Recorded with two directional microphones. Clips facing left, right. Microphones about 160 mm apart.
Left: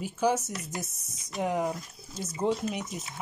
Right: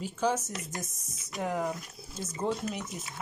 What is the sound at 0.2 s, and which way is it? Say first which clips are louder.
Speech: left 3 dB; 10° left (ahead or behind).